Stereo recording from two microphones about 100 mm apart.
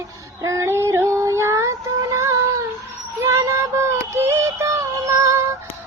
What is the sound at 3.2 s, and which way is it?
Synthetic singing, 30° right (ahead or behind).